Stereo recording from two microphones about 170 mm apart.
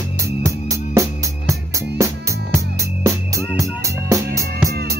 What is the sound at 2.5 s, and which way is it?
Music, 15° right (ahead or behind).